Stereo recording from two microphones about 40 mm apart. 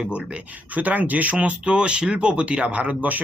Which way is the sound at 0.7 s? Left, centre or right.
Right.